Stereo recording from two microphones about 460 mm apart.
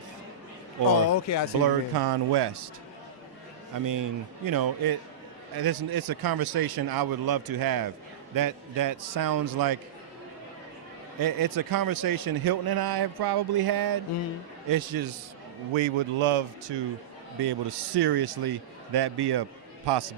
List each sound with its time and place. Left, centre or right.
1.1 s speech: left
1.6 s speech: right
3.8 s a man's voice: right
11.2 s a man's voice: right
15.7 s speech: right
17.4 s a man's voice: right